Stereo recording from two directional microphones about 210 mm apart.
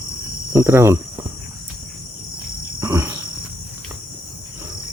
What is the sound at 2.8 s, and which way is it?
Cricket, 15° right (ahead or behind).